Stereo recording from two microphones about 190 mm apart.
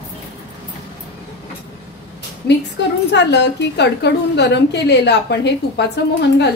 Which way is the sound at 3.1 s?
65° left (ahead or behind).